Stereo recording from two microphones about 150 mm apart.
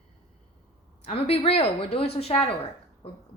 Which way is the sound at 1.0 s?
40° left (ahead or behind).